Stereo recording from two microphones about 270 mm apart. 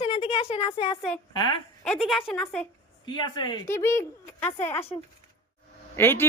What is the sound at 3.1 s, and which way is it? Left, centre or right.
Speech, centre.